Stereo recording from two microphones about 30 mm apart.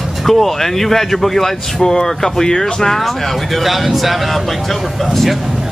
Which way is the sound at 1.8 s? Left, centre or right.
Left.